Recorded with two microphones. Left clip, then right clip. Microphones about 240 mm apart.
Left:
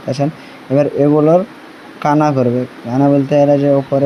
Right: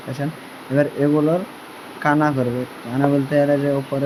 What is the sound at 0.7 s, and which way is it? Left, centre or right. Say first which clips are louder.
Speech: left 6 dB; centre.